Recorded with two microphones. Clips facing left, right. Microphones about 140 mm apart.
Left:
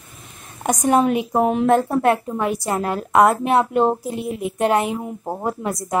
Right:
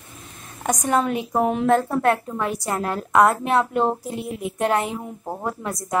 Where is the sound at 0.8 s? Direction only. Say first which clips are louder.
Left 5 dB; 15° left (ahead or behind).